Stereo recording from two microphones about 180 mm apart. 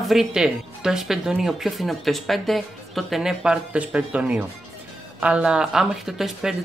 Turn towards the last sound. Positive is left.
turn(degrees=0)  # may be behind; listen again after turning